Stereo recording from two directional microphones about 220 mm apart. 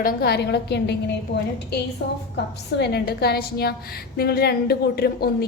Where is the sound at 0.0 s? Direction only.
45° left (ahead or behind).